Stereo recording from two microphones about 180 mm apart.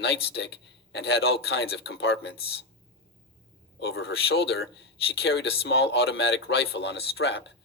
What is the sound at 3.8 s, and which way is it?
Speech, 70° left (ahead or behind).